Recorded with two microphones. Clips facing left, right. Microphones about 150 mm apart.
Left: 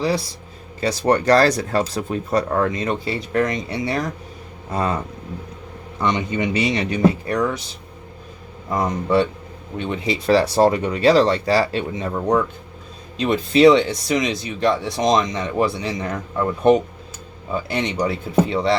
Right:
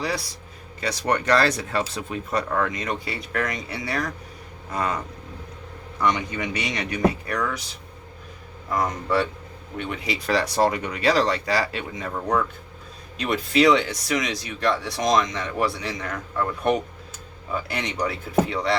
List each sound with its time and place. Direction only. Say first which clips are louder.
0.0 s speech: left 7 dB; 25° left (ahead or behind)
6.0 s speech: left 3 dB; 25° left (ahead or behind)
8.7 s speech: left 4 dB; 20° left (ahead or behind)